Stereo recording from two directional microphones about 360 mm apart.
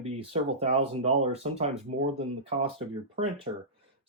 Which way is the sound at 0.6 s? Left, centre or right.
Centre.